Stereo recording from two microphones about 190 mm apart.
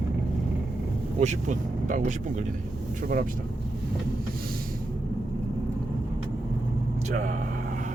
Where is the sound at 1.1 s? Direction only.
40° right (ahead or behind).